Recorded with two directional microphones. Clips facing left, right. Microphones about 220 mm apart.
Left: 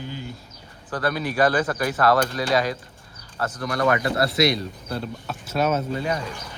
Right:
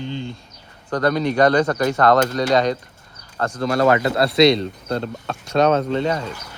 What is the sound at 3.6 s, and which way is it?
Speech, 25° right (ahead or behind).